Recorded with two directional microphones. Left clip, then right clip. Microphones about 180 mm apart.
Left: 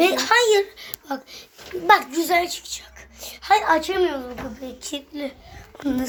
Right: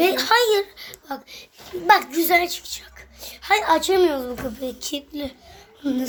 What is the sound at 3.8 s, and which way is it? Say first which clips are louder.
Speech: right 4 dB; 30° right (ahead or behind).